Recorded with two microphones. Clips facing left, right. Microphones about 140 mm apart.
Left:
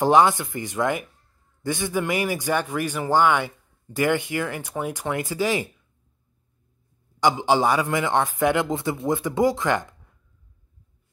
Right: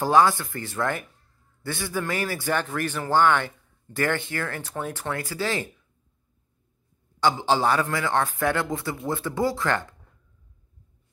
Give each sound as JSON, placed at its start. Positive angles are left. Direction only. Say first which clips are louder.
{"t": 0.0, "sound": "a man's voice", "louder": "left 2 dB", "side_deg": 20}
{"t": 7.2, "sound": "a man's voice", "louder": "left 2 dB", "side_deg": 15}